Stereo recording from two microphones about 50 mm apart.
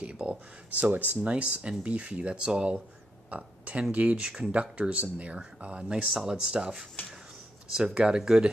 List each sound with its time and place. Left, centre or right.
0.0 s speech: centre
1.3 s speech: right
3.3 s a sound: right
3.9 s speech: right
4.2 s speech: centre
4.5 s speech: right
8.0 s speech: centre